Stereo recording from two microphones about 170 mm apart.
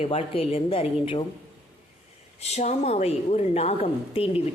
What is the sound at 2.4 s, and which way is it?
A woman's voice, 40° left (ahead or behind).